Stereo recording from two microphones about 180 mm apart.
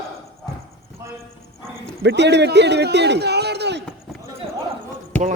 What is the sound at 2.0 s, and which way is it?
A man's voice, 75° right (ahead or behind).